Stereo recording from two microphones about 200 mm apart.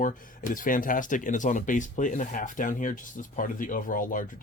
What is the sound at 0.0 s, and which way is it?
Speech, 40° left (ahead or behind).